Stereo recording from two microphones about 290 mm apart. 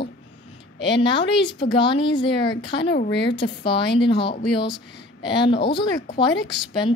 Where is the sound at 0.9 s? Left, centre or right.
Centre.